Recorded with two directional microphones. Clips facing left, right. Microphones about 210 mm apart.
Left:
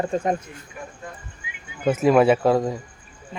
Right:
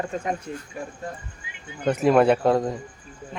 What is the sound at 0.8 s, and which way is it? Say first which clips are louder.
Speech: right 1 dB; 30° right (ahead or behind).